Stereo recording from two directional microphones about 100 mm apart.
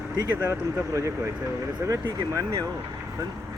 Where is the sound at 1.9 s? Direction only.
35° right (ahead or behind).